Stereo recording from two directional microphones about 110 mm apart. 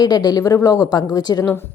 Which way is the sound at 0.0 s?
40° left (ahead or behind).